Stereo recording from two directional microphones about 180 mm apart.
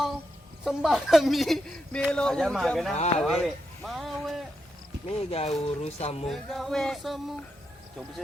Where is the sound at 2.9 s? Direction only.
40° left (ahead or behind).